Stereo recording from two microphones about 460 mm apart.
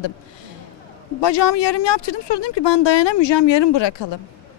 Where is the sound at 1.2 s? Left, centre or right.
Left.